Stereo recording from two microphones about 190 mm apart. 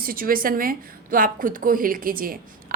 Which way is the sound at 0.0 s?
50° right (ahead or behind).